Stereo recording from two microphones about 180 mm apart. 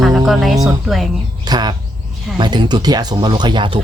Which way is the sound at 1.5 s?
25° right (ahead or behind).